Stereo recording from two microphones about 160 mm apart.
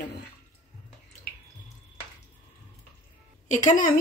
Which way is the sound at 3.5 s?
50° left (ahead or behind).